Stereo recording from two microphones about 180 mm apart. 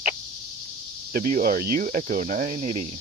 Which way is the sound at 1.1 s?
55° right (ahead or behind).